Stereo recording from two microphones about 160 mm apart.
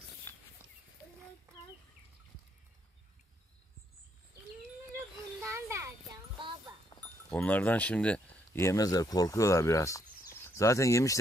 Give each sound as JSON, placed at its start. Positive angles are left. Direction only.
{"t": 0.3, "sound": "a sound", "side_deg": 10}
{"t": 5.4, "sound": "children playing", "side_deg": -20}
{"t": 7.0, "sound": "speech", "side_deg": 10}